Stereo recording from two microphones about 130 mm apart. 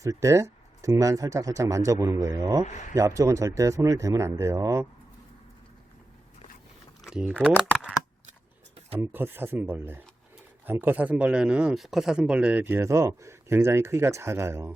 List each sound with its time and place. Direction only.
0.0 s speech: 25° right (ahead or behind)
2.6 s speech: 65° left (ahead or behind)
2.9 s speech: 25° right (ahead or behind)
7.0 s a sound: 5° right (ahead or behind)
9.0 s speech: 15° right (ahead or behind)